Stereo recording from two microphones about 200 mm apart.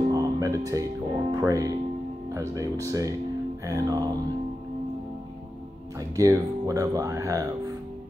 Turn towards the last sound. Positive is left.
turn(degrees=-15)  # may be behind; listen again after turning